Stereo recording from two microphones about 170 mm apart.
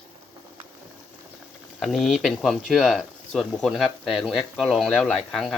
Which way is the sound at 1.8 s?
Centre (ahead or behind).